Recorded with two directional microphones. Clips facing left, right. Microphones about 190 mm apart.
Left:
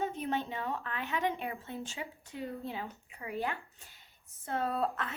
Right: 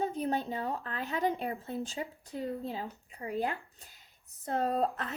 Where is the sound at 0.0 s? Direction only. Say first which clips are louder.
Right 2 dB; 35° right (ahead or behind).